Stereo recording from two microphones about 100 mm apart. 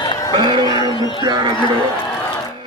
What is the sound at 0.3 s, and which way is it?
Music, 45° right (ahead or behind).